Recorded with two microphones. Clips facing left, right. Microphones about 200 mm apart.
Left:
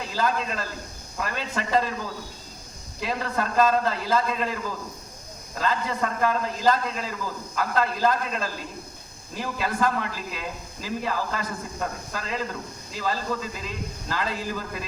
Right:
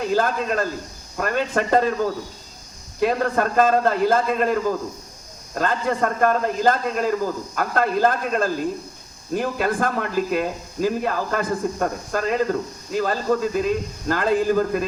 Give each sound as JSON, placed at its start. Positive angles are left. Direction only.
{"t": 0.0, "sound": "speech", "side_deg": -55}